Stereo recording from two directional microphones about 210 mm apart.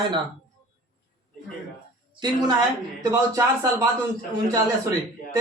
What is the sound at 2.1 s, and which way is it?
Speech, 20° right (ahead or behind).